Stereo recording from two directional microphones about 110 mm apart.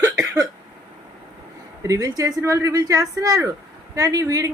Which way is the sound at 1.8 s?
30° right (ahead or behind).